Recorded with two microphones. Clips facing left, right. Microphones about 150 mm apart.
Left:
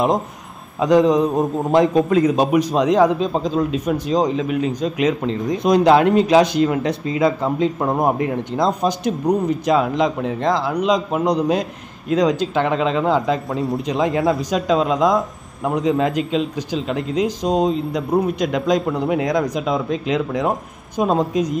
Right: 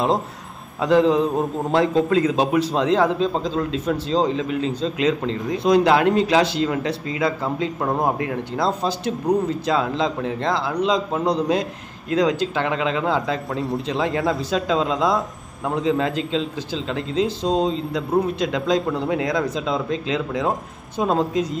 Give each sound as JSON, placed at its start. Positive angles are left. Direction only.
{"t": 0.7, "sound": "speech", "side_deg": 15}